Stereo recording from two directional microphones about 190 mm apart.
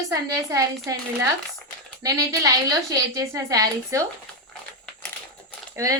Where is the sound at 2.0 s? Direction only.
20° right (ahead or behind).